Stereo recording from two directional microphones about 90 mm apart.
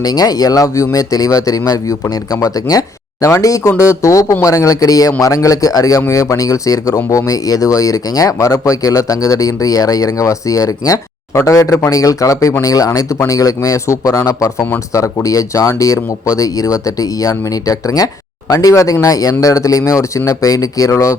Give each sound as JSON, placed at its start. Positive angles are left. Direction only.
{"t": 0.0, "sound": "speech", "side_deg": 45}